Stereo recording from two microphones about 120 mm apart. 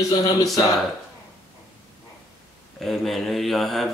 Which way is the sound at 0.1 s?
30° left (ahead or behind).